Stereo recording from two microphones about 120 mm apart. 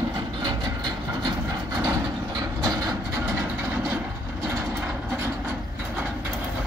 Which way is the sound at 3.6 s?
20° right (ahead or behind).